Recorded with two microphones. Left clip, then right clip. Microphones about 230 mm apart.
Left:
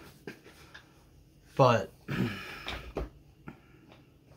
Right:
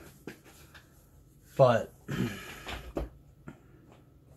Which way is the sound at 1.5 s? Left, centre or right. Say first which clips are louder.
Right 1 dB; centre.